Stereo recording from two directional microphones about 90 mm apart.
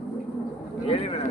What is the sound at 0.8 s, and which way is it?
Speech, 90° left.